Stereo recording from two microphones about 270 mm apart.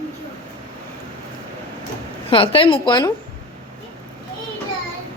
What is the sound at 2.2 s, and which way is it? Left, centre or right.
Speech, centre.